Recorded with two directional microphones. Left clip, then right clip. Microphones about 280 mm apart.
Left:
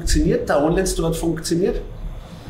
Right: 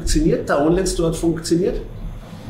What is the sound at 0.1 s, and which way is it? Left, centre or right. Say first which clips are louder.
Speech: even; centre.